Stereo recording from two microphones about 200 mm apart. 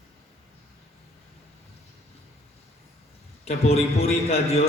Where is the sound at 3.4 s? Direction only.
30° left (ahead or behind).